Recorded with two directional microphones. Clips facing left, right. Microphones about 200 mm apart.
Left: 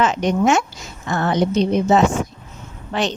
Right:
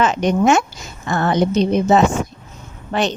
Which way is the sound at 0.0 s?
50° right (ahead or behind).